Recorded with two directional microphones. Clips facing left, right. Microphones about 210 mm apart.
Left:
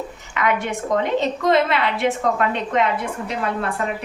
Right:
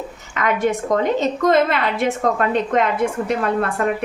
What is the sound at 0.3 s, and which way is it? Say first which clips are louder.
A woman's voice: right 3 dB; 45° right (ahead or behind).